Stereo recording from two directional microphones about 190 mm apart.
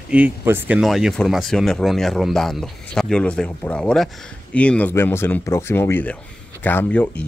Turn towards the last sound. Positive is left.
turn(degrees=5)  # may be behind; listen again after turning